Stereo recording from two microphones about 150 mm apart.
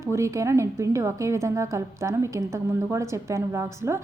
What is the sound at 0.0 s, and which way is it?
A woman's voice, 20° right (ahead or behind).